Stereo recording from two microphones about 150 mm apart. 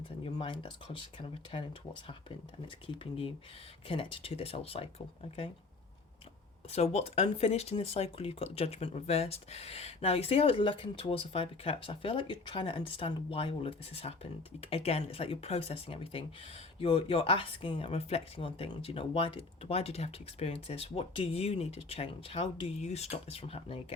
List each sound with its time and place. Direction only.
0.3 s speech: 35° left (ahead or behind)
2.8 s speech: 35° left (ahead or behind)
6.7 s speech: 45° left (ahead or behind)